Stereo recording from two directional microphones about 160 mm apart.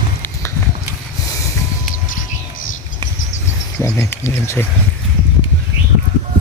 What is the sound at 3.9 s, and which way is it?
Speech, 15° left (ahead or behind).